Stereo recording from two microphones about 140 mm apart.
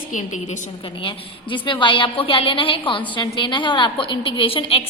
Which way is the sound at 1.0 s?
35° left (ahead or behind).